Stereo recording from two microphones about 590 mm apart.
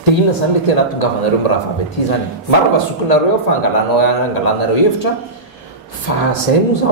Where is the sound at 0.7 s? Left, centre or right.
Left.